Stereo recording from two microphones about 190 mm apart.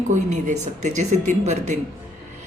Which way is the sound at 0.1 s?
40° right (ahead or behind).